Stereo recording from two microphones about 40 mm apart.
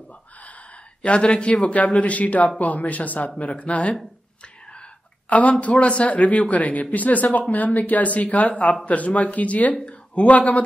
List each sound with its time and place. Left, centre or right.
1.0 s speech: left
5.3 s speech: left